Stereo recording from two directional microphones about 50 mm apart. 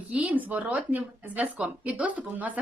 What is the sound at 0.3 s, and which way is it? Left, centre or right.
A woman's voice, right.